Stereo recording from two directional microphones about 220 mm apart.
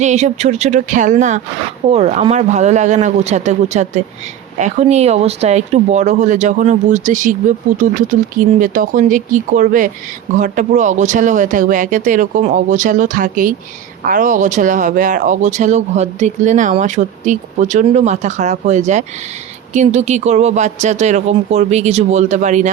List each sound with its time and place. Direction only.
0.0 s speech: 30° right (ahead or behind)